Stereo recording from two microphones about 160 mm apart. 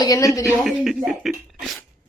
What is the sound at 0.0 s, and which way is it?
Speech, 20° left (ahead or behind).